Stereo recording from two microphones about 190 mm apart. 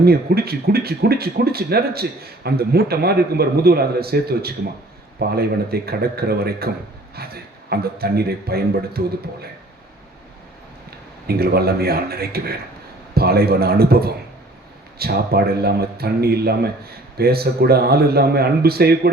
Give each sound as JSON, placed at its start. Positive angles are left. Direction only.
{"t": 0.0, "sound": "speech", "side_deg": -55}
{"t": 11.3, "sound": "a man's voice", "side_deg": -55}